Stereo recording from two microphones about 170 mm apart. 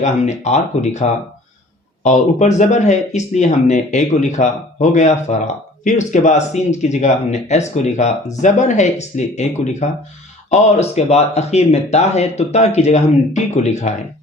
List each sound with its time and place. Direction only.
0.0 s speech: 45° left (ahead or behind)
2.0 s speech: 45° left (ahead or behind)